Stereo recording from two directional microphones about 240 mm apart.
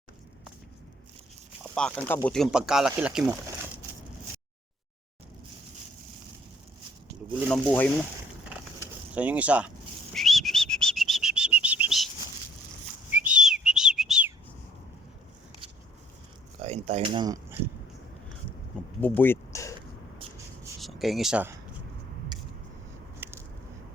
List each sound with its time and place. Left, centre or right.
1.7 s speech: centre
7.4 s speech: centre
8.8 s a sound: centre
10.1 s bird: centre
13.1 s whistle: centre
16.6 s speech: right
18.9 s a sound: centre
20.8 s speech: centre
23.2 s a sound: centre